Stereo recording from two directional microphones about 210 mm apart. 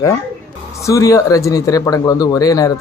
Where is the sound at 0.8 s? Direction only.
15° left (ahead or behind).